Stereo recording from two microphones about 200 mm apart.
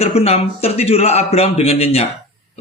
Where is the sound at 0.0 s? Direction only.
30° left (ahead or behind).